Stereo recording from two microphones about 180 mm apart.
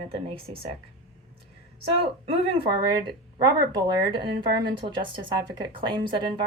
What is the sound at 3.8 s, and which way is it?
A woman's voice, 25° right (ahead or behind).